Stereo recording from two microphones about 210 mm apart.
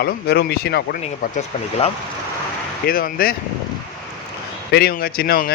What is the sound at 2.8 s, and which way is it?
Speech, 45° left (ahead or behind).